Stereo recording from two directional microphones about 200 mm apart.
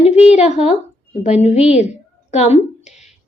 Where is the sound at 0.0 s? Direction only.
35° left (ahead or behind).